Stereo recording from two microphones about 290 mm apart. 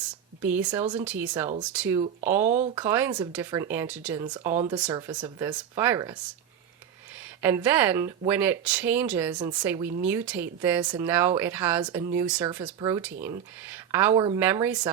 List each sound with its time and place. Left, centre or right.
0.1 s a sound: centre
0.9 s speech: centre
2.5 s speech: right
2.7 s speech: centre